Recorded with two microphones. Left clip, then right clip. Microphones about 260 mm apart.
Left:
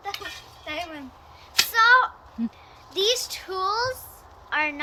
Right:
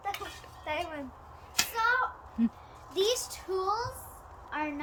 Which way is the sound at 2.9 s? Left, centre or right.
Centre.